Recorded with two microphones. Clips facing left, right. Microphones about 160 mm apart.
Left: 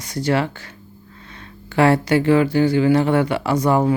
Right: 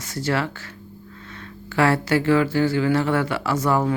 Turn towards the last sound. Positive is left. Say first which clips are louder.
# left 4 dB
turn(degrees=15)  # may be behind; listen again after turning